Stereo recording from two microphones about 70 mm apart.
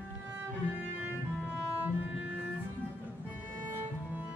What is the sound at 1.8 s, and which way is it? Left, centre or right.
Cello, centre.